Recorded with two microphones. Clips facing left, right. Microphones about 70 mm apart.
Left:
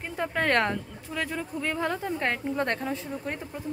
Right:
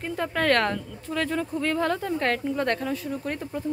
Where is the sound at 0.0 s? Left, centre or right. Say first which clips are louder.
Right 2 dB; centre.